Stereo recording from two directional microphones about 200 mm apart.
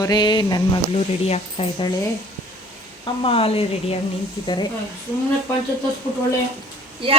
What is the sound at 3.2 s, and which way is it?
Speech, 30° left (ahead or behind).